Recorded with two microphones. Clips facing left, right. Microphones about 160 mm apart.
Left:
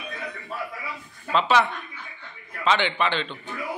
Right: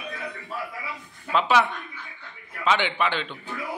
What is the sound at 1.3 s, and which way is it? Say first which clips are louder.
Speech: even; 10° right (ahead or behind).